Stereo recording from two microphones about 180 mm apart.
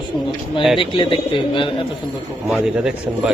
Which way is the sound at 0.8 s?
30° left (ahead or behind).